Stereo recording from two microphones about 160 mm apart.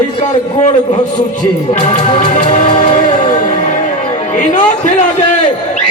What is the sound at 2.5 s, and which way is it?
Music, 45° left (ahead or behind).